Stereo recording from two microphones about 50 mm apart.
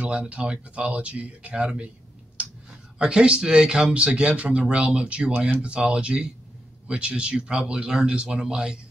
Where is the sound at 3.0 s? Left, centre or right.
Centre.